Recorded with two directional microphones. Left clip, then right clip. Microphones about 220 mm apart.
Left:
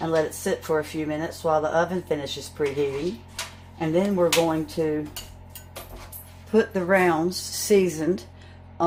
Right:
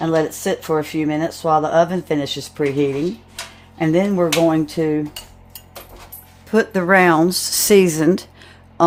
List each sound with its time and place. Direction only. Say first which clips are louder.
0.0 s speech: right 5 dB; 45° right (ahead or behind)
3.8 s speech: right 5 dB; 45° right (ahead or behind)
6.5 s speech: right 6 dB; 50° right (ahead or behind)